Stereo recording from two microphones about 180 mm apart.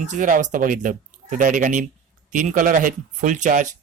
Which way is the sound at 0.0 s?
45° right (ahead or behind).